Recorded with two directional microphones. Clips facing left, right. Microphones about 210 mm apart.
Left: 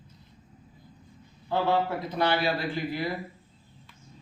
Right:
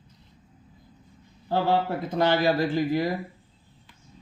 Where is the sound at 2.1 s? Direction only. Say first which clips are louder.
Right 7 dB; 45° right (ahead or behind).